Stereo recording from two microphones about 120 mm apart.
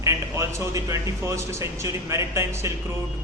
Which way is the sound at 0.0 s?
25° right (ahead or behind).